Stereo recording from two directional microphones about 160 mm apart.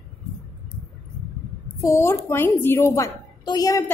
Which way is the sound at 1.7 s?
20° left (ahead or behind).